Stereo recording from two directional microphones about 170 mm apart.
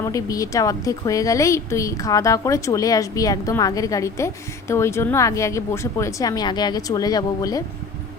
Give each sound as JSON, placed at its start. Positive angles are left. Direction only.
{"t": 0.0, "sound": "a woman's voice", "side_deg": 20}